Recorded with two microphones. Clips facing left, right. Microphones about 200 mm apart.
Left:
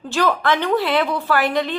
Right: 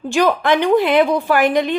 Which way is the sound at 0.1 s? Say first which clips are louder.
Right 4 dB; 15° right (ahead or behind).